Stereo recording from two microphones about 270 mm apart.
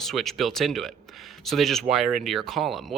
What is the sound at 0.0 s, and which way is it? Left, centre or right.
A man's voice, centre.